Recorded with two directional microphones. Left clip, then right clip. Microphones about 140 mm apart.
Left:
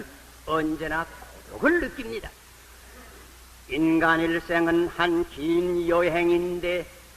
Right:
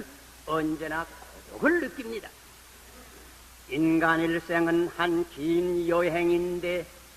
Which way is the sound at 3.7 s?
25° right (ahead or behind).